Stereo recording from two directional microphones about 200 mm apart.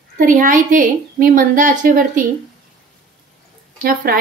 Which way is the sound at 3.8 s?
50° right (ahead or behind).